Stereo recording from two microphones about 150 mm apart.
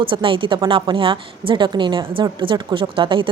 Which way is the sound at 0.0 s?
35° right (ahead or behind).